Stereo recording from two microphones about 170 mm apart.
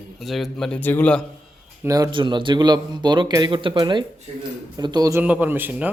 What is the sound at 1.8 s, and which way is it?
A man's voice, 20° right (ahead or behind).